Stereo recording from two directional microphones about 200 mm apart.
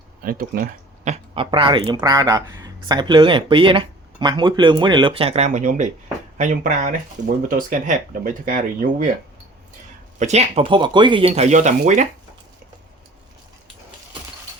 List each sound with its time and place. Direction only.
0.2 s speech: 45° right (ahead or behind)
10.2 s speech: 35° right (ahead or behind)